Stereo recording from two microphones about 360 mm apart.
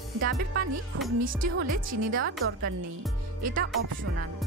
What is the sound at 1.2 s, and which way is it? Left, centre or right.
Speech, right.